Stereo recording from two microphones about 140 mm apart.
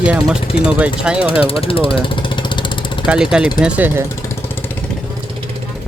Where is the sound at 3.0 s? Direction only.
5° right (ahead or behind).